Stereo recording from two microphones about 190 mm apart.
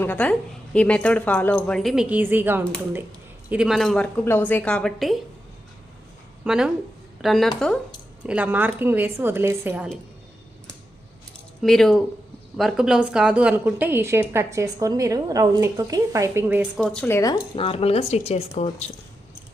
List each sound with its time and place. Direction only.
0.0 s speech: 10° left (ahead or behind)
6.4 s a woman's voice: 5° right (ahead or behind)
11.6 s a woman's voice: centre (ahead or behind)
16.8 s speech: 5° left (ahead or behind); by 18.9 s 35° left (ahead or behind)